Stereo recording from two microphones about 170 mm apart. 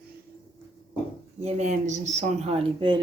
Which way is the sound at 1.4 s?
40° right (ahead or behind).